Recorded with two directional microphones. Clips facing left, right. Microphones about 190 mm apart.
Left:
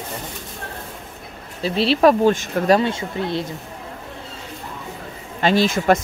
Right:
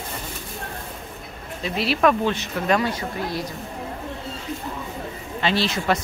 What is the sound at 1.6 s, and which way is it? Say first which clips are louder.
Speech: left 5 dB; 30° left (ahead or behind).